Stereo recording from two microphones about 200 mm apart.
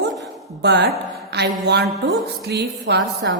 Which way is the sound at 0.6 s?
60° right (ahead or behind).